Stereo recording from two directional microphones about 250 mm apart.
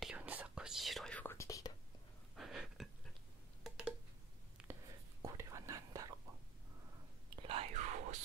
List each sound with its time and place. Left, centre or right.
0.0 s whispering: centre
2.3 s a sound: centre
4.6 s whispering: centre
7.3 s whispering: right